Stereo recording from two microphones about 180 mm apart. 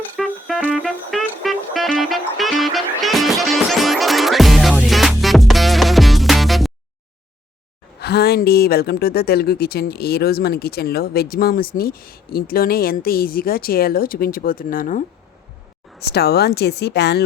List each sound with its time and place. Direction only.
0.2 s music: centre (ahead or behind)
8.0 s speech: 60° left (ahead or behind)
16.0 s speech: 65° left (ahead or behind)